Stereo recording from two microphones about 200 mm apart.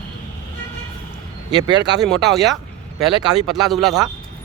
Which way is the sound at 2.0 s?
Centre (ahead or behind).